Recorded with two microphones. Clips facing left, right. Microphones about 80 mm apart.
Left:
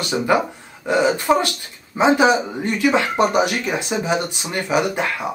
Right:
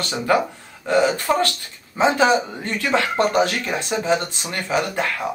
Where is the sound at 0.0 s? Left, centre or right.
Centre.